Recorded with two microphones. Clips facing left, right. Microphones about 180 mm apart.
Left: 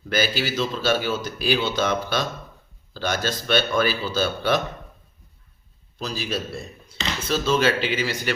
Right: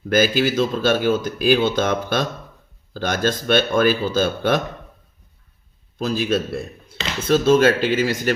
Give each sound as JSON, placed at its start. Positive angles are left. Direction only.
{"t": 0.1, "sound": "speech", "side_deg": -50}
{"t": 6.0, "sound": "a man's voice", "side_deg": -50}